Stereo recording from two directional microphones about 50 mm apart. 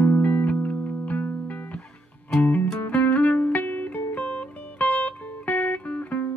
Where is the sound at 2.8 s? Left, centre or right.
Left.